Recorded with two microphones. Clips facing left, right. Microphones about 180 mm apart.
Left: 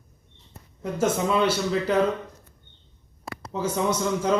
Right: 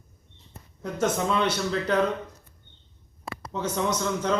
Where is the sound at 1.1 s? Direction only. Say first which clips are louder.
Left 3 dB; 5° left (ahead or behind).